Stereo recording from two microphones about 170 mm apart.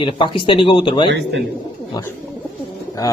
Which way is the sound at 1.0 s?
90° right.